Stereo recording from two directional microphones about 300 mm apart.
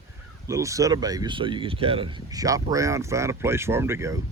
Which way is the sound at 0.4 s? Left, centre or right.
Centre.